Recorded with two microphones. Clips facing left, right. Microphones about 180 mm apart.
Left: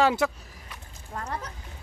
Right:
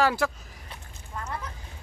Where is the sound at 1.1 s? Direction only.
40° left (ahead or behind).